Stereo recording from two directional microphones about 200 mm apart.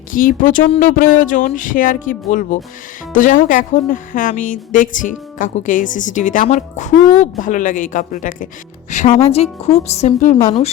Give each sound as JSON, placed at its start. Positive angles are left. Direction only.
{"t": 0.1, "sound": "speech", "side_deg": 40}